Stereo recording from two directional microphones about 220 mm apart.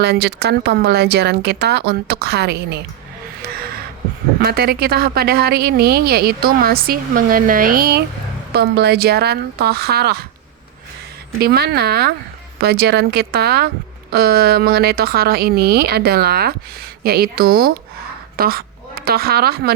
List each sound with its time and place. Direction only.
0.0 s speech: 50° right (ahead or behind)
3.4 s gasp: 45° right (ahead or behind)
4.4 s speech: 45° right (ahead or behind)
11.3 s a woman's voice: 45° right (ahead or behind)